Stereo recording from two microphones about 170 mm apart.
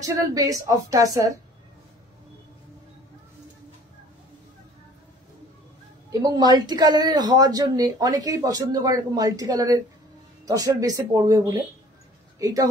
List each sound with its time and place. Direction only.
0.0 s speech: 20° right (ahead or behind)
6.2 s speech: 25° right (ahead or behind)